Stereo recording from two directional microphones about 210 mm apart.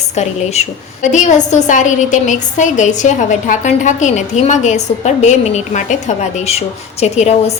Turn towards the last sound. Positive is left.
turn(degrees=30)  # may be behind; listen again after turning